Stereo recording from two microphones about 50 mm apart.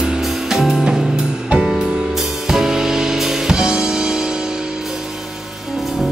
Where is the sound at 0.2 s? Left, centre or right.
Centre.